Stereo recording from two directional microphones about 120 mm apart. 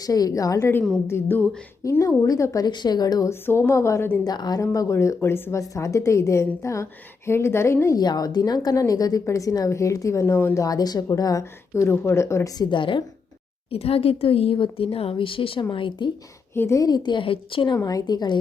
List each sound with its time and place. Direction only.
0.0 s a woman's voice: 30° left (ahead or behind)
3.4 s speech: 20° left (ahead or behind)
4.2 s a woman's voice: 35° left (ahead or behind)
8.0 s speech: 35° left (ahead or behind)
12.7 s speech: 45° left (ahead or behind)
13.7 s speech: 55° left (ahead or behind)
16.6 s a woman's voice: 25° left (ahead or behind); by 17.7 s 45° left (ahead or behind)
17.8 s a woman's voice: 35° left (ahead or behind)